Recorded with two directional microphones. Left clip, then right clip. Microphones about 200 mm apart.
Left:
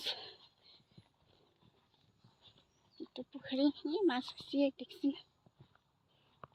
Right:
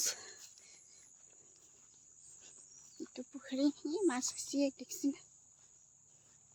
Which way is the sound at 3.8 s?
10° right (ahead or behind).